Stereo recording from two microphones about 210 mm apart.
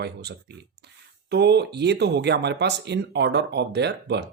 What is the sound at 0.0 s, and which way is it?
Speech, 50° right (ahead or behind).